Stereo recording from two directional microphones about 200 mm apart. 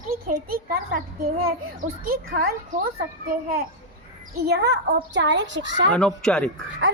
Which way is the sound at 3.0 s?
50° right (ahead or behind).